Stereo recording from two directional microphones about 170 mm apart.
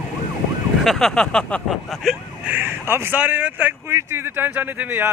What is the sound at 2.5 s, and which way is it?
Speech, 15° right (ahead or behind).